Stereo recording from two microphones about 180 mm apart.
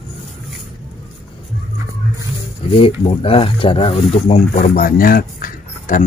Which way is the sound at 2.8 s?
30° left (ahead or behind).